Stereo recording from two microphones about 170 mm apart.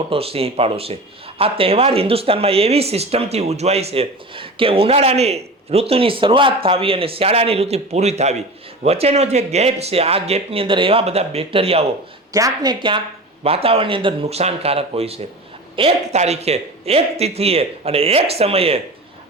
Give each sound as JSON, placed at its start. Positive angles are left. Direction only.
{"t": 0.1, "sound": "speech", "side_deg": -35}
{"t": 12.3, "sound": "a woman's voice", "side_deg": -20}